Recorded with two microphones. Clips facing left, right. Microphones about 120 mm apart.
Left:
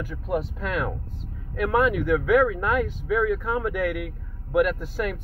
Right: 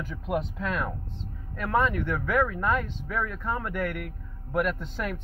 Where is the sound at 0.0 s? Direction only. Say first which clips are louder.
Left 2 dB; 5° left (ahead or behind).